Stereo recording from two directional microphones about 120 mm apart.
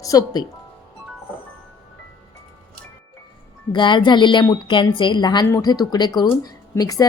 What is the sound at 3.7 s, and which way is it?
Speech, 40° left (ahead or behind).